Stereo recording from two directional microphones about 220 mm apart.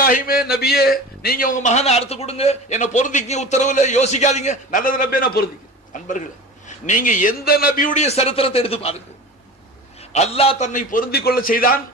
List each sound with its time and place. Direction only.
0.0 s a man's voice: 40° left (ahead or behind); by 8.9 s 25° left (ahead or behind)
10.1 s a man's voice: 30° left (ahead or behind)